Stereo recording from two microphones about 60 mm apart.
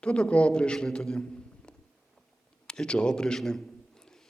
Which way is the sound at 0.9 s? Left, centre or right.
Centre.